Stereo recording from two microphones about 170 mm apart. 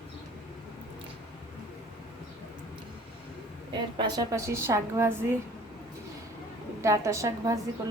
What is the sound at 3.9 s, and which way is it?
A woman's voice, 25° right (ahead or behind).